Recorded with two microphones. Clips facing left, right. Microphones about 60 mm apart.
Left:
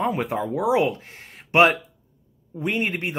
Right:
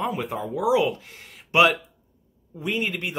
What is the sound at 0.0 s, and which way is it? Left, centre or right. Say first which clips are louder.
Speech: left 3 dB; left.